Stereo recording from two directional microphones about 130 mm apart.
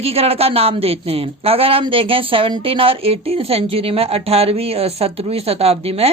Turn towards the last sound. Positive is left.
turn(degrees=-50)  # may be behind; listen again after turning